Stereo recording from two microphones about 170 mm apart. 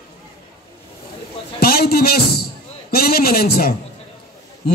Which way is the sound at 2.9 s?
60° left (ahead or behind).